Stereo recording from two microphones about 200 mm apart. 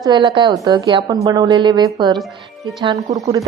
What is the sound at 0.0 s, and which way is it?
A woman's voice, 20° right (ahead or behind).